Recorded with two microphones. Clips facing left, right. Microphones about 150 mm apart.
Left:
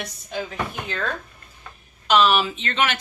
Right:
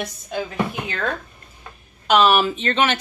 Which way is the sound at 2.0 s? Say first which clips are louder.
Right 2 dB; 50° right (ahead or behind).